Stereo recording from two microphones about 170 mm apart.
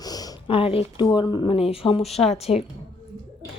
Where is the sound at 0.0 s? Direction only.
20° left (ahead or behind).